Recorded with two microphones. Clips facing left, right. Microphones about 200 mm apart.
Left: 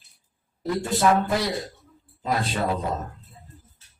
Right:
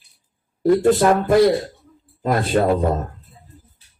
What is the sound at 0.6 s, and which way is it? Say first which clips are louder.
Speech: right 8 dB; 55° right (ahead or behind).